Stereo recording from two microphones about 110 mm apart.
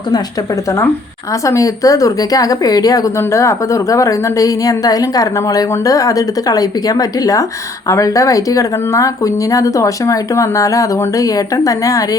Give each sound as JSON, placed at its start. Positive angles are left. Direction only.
{"t": 1.3, "sound": "a woman's voice", "side_deg": 30}